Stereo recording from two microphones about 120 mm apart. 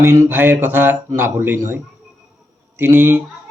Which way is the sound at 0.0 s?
20° right (ahead or behind).